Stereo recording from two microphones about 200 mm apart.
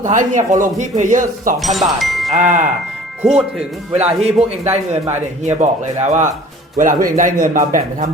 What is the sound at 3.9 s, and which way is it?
Speech, 30° right (ahead or behind).